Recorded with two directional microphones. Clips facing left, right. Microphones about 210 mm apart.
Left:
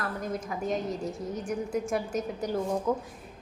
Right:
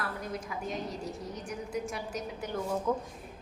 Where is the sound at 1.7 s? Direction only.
50° left (ahead or behind).